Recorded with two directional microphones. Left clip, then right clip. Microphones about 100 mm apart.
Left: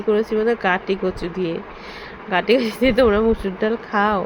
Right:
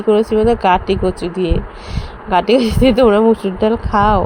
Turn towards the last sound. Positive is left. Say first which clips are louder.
# right 6 dB
turn(degrees=-50)  # may be behind; listen again after turning